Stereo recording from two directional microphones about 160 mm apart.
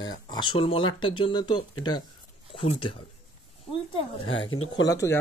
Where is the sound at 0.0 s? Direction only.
30° left (ahead or behind).